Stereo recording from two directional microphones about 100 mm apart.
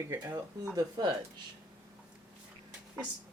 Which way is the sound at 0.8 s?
45° right (ahead or behind).